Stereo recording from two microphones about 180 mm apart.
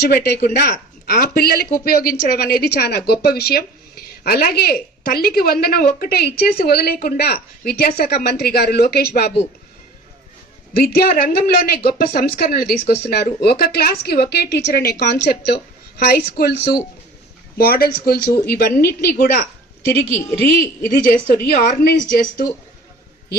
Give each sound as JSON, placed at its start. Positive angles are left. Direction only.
{"t": 0.0, "sound": "speech", "side_deg": 65}
{"t": 10.8, "sound": "speech", "side_deg": 55}
{"t": 20.9, "sound": "speech", "side_deg": 55}